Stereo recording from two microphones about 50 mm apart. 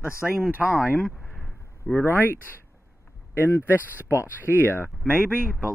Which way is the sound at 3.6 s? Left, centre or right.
Right.